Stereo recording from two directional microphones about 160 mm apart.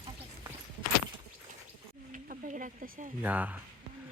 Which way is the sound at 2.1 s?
55° right (ahead or behind).